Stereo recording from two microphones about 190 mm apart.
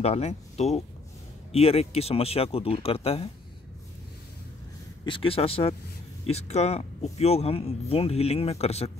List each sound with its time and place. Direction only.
0.0 s speech: 35° left (ahead or behind)
5.0 s speech: 25° left (ahead or behind)